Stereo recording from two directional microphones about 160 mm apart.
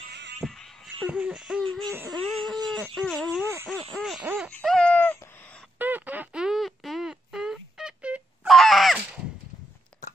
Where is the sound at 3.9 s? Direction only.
Centre (ahead or behind).